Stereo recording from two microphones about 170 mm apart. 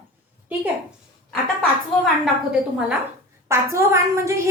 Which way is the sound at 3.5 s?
15° right (ahead or behind).